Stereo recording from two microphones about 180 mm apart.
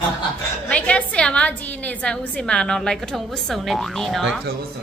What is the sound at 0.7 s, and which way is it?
A woman's voice, 5° left (ahead or behind).